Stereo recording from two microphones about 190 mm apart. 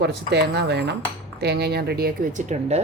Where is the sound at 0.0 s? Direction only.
60° right (ahead or behind); by 2.8 s 35° right (ahead or behind).